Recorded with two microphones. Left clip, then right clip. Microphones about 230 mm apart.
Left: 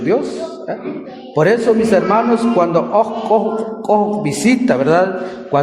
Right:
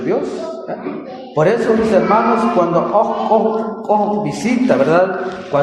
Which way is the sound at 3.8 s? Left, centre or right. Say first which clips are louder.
Left 1 dB; left.